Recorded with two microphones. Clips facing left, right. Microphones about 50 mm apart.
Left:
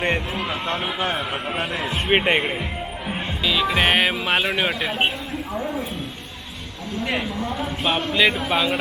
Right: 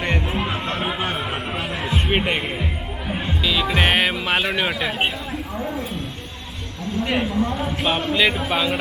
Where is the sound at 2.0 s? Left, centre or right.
Centre.